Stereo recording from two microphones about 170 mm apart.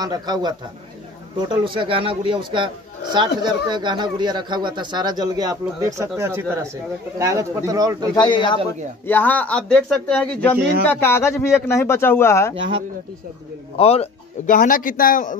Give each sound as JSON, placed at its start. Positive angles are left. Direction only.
{"t": 0.0, "sound": "speech", "side_deg": -25}
{"t": 8.2, "sound": "a man's voice", "side_deg": 30}
{"t": 9.0, "sound": "a man's voice", "side_deg": 10}
{"t": 13.7, "sound": "a man's voice", "side_deg": 35}
{"t": 14.4, "sound": "a man's voice", "side_deg": 50}